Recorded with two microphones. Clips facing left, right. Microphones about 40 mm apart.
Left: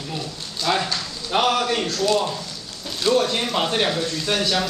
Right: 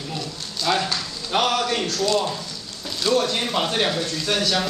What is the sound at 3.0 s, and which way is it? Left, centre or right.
Speech, centre.